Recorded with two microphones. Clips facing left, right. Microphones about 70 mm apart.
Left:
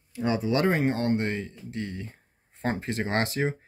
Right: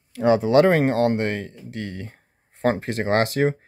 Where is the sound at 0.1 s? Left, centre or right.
Right.